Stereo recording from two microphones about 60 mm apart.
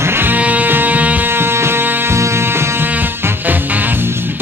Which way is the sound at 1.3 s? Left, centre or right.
Right.